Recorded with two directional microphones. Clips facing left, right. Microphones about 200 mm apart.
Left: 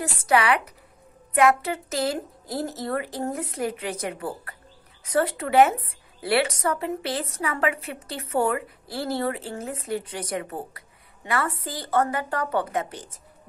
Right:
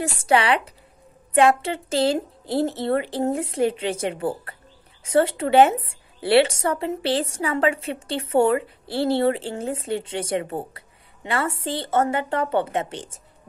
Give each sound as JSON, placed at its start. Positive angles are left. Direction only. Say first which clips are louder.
{"t": 0.0, "sound": "a woman's voice", "louder": "right 2 dB", "side_deg": -30}